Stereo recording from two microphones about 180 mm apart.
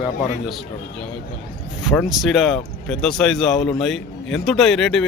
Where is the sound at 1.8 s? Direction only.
Centre (ahead or behind).